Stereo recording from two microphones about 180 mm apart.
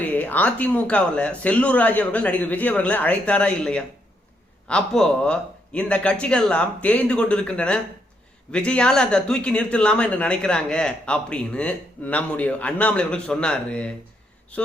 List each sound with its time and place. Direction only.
0.1 s speech: 10° left (ahead or behind)